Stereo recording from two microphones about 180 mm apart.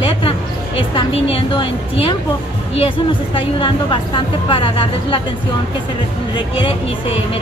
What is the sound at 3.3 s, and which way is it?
A woman's voice, 30° left (ahead or behind).